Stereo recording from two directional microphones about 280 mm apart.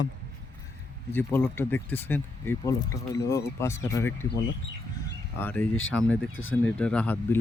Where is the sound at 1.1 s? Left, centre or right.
Centre.